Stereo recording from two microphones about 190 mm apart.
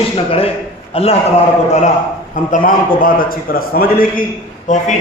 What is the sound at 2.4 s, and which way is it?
A man's voice, 40° left (ahead or behind).